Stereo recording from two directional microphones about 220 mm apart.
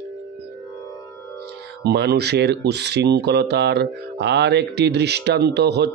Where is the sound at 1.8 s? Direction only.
50° right (ahead or behind).